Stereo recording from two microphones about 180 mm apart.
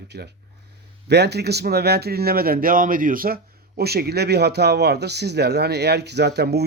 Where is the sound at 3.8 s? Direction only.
60° right (ahead or behind).